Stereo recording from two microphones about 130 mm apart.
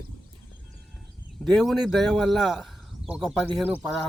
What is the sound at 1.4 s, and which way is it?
A man's voice, 5° left (ahead or behind).